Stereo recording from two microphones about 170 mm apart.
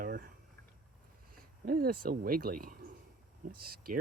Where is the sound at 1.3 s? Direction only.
60° right (ahead or behind).